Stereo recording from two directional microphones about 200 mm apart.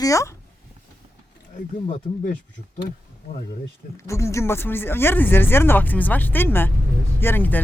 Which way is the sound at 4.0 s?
15° left (ahead or behind).